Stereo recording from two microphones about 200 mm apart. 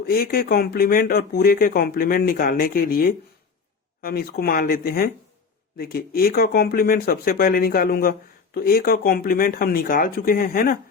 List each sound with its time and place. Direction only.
0.0 s speech: 50° left (ahead or behind)